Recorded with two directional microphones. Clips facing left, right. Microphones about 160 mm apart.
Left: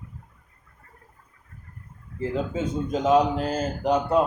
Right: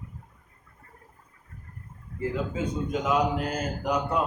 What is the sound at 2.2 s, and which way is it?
A man's voice, 30° left (ahead or behind).